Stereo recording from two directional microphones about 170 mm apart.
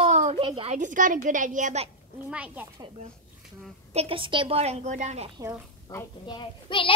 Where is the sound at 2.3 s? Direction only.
10° right (ahead or behind).